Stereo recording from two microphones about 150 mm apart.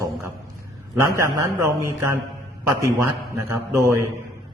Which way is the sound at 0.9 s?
20° right (ahead or behind).